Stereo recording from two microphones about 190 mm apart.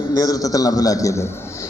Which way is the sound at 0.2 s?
20° left (ahead or behind).